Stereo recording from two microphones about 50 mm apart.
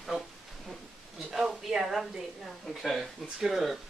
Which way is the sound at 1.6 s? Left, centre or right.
Centre.